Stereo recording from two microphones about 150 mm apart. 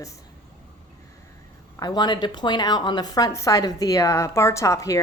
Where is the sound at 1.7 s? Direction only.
25° left (ahead or behind).